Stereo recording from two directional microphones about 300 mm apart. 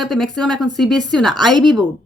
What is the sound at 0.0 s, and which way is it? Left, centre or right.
Speech, centre.